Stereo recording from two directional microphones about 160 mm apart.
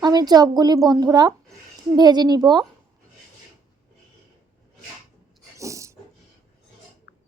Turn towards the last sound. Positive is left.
turn(degrees=-20)  # may be behind; listen again after turning